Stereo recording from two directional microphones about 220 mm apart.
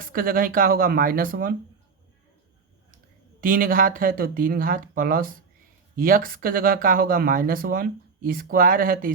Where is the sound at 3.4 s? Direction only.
40° right (ahead or behind).